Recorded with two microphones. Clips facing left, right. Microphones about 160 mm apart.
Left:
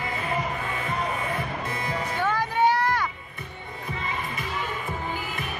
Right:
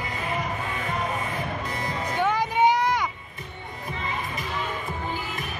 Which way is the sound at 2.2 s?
15° right (ahead or behind).